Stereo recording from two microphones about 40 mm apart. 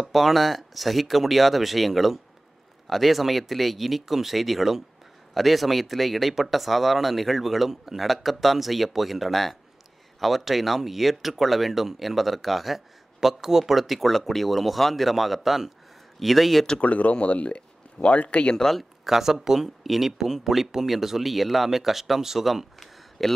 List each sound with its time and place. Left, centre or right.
0.0 s speech: centre
16.8 s speech: left
19.0 s speech: centre